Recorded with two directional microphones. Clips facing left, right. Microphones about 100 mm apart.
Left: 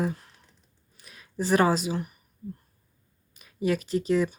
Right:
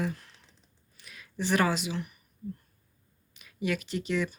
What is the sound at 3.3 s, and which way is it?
Speech, 35° left (ahead or behind).